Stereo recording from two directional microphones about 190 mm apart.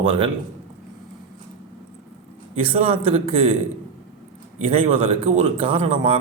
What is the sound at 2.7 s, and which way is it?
Speech, 30° right (ahead or behind).